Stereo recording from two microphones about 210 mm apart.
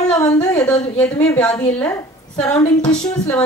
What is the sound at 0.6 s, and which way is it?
A woman's voice, 5° left (ahead or behind).